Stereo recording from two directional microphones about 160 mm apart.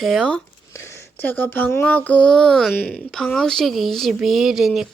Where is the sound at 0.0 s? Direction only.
Centre (ahead or behind).